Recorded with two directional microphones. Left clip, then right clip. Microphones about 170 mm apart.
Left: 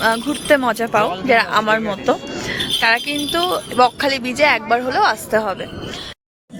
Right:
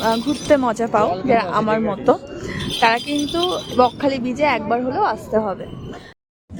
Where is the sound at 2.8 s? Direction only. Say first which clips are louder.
Right 2 dB; 10° right (ahead or behind).